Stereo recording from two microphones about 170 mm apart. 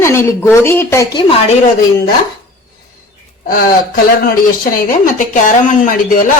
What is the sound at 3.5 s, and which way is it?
Speech, 55° left (ahead or behind).